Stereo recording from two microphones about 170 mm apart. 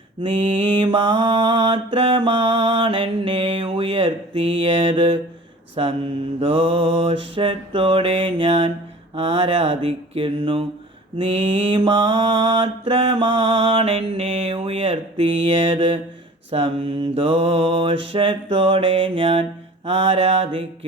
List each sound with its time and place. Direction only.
0.7 s mantra: 30° right (ahead or behind)